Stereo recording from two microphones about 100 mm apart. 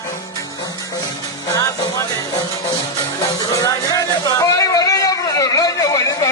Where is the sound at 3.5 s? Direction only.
35° left (ahead or behind).